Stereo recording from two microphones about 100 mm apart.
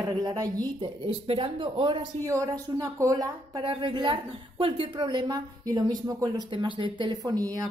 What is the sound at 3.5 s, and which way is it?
A woman's voice, 55° right (ahead or behind).